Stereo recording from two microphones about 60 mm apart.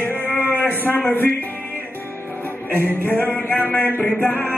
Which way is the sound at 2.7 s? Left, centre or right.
Left.